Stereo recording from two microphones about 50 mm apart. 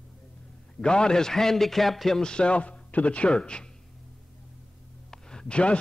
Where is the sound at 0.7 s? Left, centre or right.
Centre.